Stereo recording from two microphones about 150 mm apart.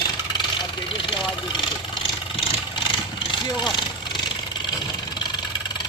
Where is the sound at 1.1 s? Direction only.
30° left (ahead or behind).